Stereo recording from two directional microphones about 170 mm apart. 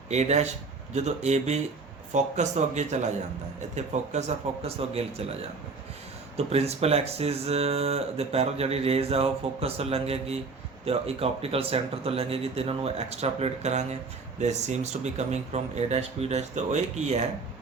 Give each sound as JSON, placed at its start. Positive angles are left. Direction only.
{"t": 0.1, "sound": "speech", "side_deg": -40}
{"t": 6.3, "sound": "speech", "side_deg": -35}